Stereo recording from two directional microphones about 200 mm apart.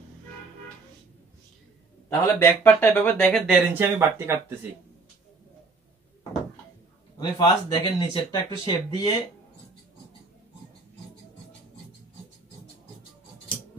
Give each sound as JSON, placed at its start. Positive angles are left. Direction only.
{"t": 2.0, "sound": "speech", "side_deg": 10}
{"t": 3.7, "sound": "speech", "side_deg": -10}
{"t": 7.2, "sound": "speech", "side_deg": 20}